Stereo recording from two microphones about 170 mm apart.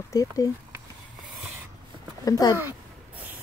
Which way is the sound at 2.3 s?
20° left (ahead or behind).